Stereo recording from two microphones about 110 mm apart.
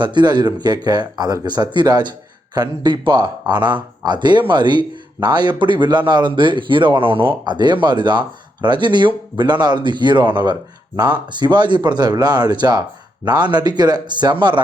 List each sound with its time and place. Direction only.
0.0 s speech: 45° right (ahead or behind)
7.4 s speech: 45° right (ahead or behind)